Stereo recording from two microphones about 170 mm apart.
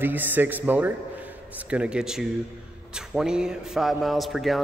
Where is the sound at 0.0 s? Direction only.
10° right (ahead or behind).